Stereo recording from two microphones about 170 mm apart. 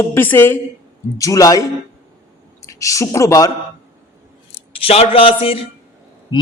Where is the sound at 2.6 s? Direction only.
20° left (ahead or behind).